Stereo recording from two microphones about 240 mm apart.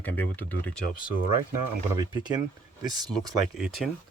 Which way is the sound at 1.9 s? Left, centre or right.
Centre.